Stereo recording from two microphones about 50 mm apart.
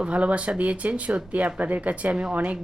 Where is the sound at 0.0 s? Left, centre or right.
Right.